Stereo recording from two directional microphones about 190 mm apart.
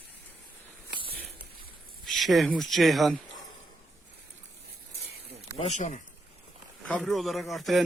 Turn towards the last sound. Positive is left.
turn(degrees=0)  # may be behind; listen again after turning